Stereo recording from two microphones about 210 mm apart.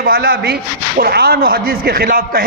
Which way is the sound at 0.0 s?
45° right (ahead or behind).